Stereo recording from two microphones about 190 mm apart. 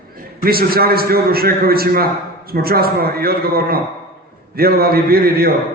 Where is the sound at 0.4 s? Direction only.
50° right (ahead or behind).